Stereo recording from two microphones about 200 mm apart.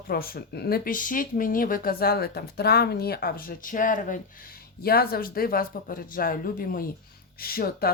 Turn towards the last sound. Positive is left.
turn(degrees=50)  # may be behind; listen again after turning